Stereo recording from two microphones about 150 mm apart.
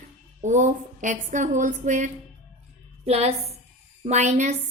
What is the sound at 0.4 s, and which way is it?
A woman's voice, 55° right (ahead or behind).